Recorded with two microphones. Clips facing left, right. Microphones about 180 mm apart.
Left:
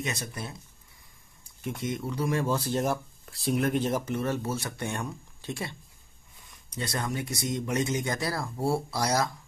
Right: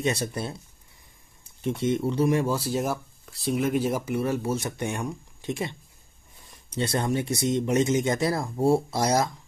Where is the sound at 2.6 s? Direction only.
5° right (ahead or behind).